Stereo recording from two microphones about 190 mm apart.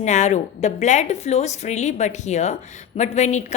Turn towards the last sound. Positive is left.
turn(degrees=35)  # may be behind; listen again after turning